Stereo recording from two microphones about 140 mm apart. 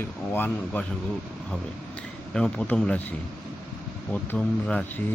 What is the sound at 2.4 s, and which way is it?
Speech, 5° left (ahead or behind).